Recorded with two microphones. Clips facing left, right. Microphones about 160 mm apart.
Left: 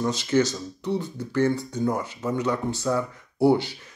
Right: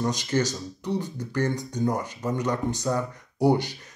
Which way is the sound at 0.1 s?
15° right (ahead or behind).